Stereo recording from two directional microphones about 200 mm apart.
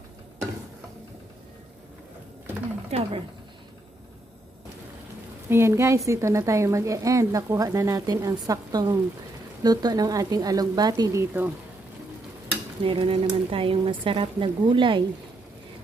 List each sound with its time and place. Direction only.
2.9 s speech: 30° right (ahead or behind)
5.5 s a woman's voice: 15° right (ahead or behind)
12.8 s speech: 25° right (ahead or behind)